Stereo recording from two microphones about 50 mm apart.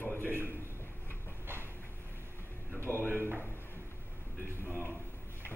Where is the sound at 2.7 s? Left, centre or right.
Left.